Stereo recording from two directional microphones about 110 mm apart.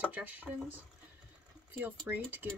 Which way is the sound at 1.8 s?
20° right (ahead or behind).